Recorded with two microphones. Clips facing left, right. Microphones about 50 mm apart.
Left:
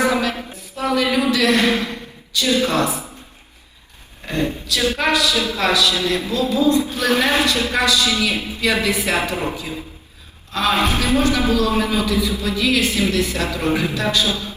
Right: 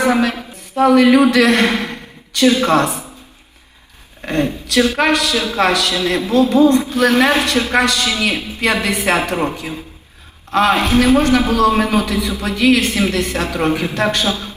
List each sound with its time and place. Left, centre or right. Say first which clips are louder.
0.0 s a man's voice: right 3 dB; right
4.3 s a man's voice: right 3 dB; right
10.5 s a man's voice: right 5 dB; right